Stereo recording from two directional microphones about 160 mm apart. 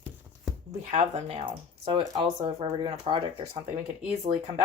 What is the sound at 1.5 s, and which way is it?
Speech, 30° right (ahead or behind).